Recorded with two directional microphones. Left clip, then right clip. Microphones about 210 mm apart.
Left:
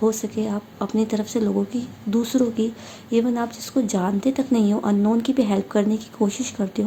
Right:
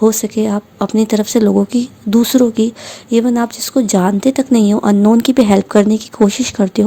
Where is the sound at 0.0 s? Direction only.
50° right (ahead or behind).